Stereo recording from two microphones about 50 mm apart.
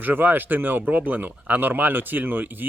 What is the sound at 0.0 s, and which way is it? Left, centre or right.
Speech, right.